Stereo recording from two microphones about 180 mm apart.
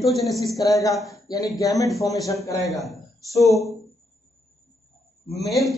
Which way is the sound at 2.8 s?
Centre (ahead or behind).